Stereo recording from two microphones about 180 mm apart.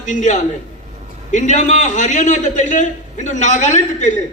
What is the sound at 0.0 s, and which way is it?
A man's voice, 45° left (ahead or behind).